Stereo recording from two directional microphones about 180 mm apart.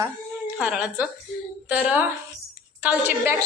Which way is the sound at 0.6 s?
5° right (ahead or behind).